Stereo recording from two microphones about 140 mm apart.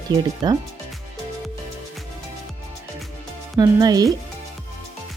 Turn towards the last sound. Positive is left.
turn(degrees=-25)  # may be behind; listen again after turning